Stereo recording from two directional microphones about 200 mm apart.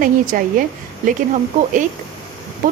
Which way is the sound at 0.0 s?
45° right (ahead or behind).